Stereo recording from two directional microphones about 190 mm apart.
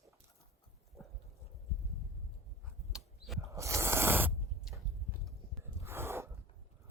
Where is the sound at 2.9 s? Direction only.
Centre (ahead or behind).